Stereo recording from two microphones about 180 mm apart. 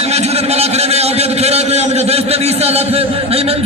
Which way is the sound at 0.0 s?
35° right (ahead or behind).